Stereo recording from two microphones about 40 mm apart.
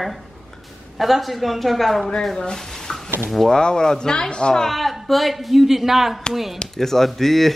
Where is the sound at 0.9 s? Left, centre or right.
Centre.